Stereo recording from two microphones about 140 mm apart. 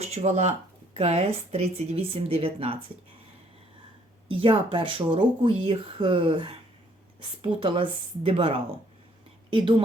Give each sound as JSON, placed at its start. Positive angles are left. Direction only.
{"t": 0.0, "sound": "speech", "side_deg": -50}
{"t": 4.3, "sound": "speech", "side_deg": -40}